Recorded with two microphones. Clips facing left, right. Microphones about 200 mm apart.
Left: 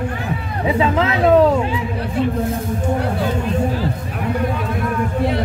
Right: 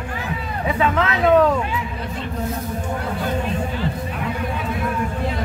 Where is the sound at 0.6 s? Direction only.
25° left (ahead or behind).